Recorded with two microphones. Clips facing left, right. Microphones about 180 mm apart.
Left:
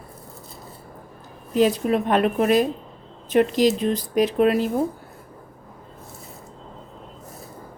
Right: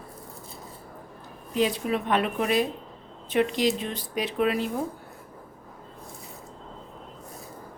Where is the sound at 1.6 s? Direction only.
45° left (ahead or behind).